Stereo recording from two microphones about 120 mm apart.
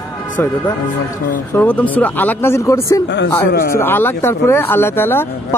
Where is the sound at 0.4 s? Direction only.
20° left (ahead or behind).